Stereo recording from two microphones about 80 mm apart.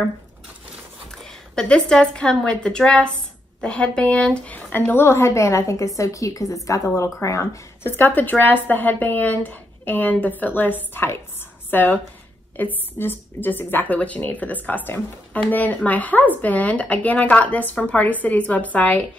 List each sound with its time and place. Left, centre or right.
1.1 s a woman's voice: centre; by 7.9 s left
8.0 s speech: left